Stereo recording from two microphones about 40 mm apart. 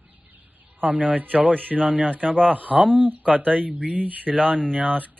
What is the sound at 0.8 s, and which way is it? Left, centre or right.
Speech, right.